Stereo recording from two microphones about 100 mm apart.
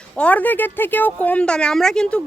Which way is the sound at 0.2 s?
15° left (ahead or behind).